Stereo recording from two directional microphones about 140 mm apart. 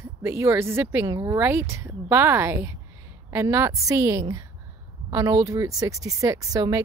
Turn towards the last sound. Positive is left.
turn(degrees=-25)  # may be behind; listen again after turning